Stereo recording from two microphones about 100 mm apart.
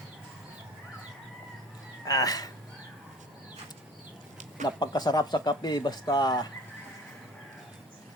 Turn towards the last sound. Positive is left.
turn(degrees=45)  # may be behind; listen again after turning